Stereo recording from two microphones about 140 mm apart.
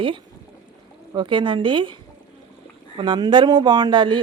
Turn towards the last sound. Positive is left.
turn(degrees=-35)  # may be behind; listen again after turning